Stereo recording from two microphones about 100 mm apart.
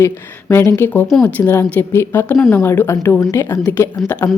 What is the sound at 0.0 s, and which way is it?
A woman's voice, 25° left (ahead or behind).